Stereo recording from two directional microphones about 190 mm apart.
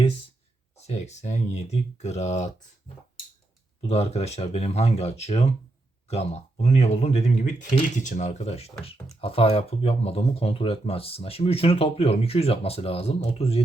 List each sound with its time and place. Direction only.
0.8 s speech: 35° left (ahead or behind)
3.8 s speech: 30° left (ahead or behind)